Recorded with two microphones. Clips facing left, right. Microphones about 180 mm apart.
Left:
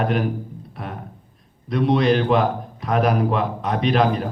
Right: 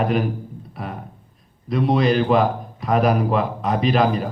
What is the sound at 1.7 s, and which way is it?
A man's voice, centre (ahead or behind).